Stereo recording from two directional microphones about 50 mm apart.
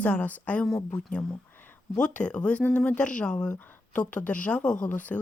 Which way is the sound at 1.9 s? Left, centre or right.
Left.